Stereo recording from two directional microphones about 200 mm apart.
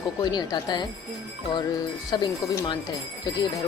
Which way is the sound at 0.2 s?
20° left (ahead or behind).